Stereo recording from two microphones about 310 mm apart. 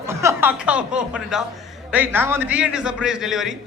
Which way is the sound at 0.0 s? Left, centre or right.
Centre.